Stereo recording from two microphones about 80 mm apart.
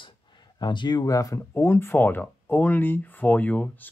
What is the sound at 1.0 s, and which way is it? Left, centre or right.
Speech, left.